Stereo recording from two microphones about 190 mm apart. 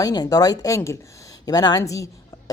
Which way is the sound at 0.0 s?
20° left (ahead or behind).